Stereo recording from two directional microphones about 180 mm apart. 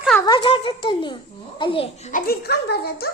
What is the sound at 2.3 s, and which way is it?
Speech, 60° left (ahead or behind).